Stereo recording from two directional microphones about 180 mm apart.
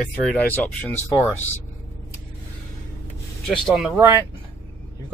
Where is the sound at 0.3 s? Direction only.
10° left (ahead or behind).